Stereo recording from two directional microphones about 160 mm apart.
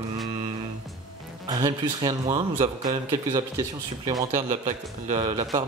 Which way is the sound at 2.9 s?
30° right (ahead or behind).